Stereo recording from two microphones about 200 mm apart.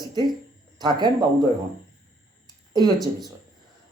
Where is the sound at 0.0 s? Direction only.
20° right (ahead or behind).